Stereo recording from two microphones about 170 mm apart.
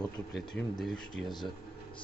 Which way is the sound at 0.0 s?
Centre (ahead or behind).